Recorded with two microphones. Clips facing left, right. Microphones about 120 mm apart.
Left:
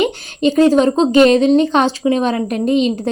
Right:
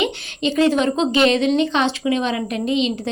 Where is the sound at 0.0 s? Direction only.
45° left (ahead or behind).